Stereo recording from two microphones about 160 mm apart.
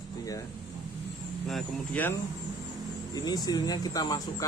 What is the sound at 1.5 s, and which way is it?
Speech, centre (ahead or behind).